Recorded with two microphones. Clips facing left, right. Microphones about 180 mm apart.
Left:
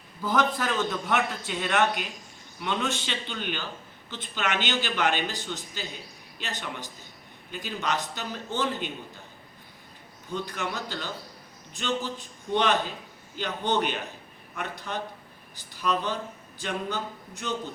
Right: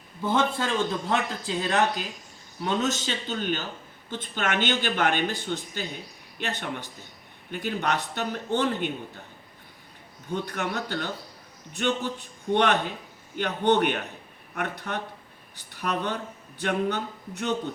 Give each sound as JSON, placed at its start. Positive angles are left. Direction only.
{"t": 0.2, "sound": "a man's voice", "side_deg": -25}
{"t": 10.3, "sound": "a man's voice", "side_deg": -60}